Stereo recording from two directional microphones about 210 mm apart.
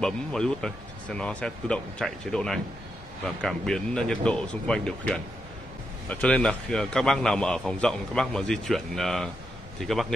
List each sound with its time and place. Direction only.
0.0 s a man's voice: 5° left (ahead or behind)